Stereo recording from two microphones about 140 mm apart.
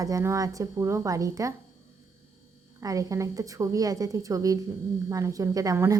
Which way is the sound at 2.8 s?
25° right (ahead or behind).